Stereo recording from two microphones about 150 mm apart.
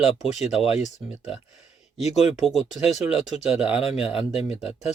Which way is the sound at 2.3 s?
Centre (ahead or behind).